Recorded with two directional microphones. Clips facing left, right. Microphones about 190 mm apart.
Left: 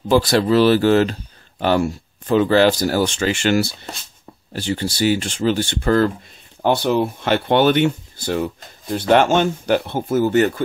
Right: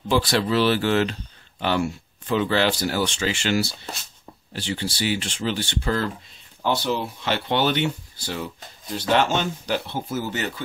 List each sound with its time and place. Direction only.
0.1 s speech: 40° left (ahead or behind)